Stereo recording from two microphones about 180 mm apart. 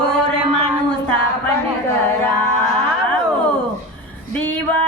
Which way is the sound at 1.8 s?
15° left (ahead or behind).